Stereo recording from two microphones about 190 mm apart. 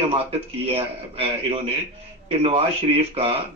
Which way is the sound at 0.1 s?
30° right (ahead or behind).